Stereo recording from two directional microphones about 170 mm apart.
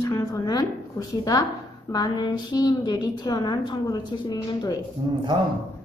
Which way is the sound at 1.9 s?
25° left (ahead or behind).